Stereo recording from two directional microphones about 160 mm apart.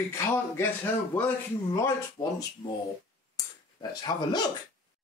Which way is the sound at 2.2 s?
30° left (ahead or behind).